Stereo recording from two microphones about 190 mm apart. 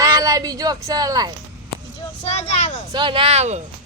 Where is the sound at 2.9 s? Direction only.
25° right (ahead or behind).